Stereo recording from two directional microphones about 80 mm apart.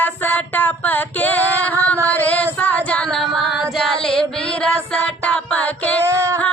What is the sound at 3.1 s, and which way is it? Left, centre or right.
Child singing, centre.